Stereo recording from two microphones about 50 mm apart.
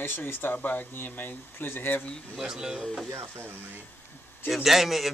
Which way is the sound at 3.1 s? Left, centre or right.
Right.